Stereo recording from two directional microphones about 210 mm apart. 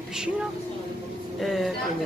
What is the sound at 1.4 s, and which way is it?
Speech, centre (ahead or behind).